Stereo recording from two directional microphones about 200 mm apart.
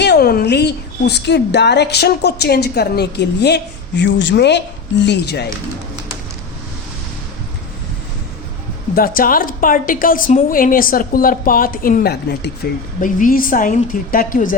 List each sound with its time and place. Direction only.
0.0 s a woman's voice: 55° left (ahead or behind)
9.0 s a woman's voice: 45° left (ahead or behind)